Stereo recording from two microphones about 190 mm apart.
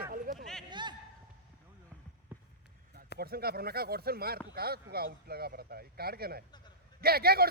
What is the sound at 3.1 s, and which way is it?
Speech, 55° right (ahead or behind).